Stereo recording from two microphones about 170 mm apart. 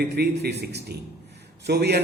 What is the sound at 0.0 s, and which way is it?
A man's voice, 70° right (ahead or behind).